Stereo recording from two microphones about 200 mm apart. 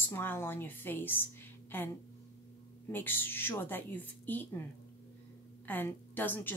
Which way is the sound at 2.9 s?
10° left (ahead or behind).